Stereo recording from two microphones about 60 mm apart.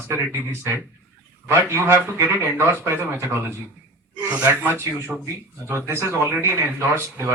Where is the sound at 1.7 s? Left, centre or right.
Right.